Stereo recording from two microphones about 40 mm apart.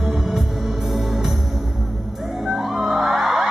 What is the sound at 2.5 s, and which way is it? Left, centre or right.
Music, centre.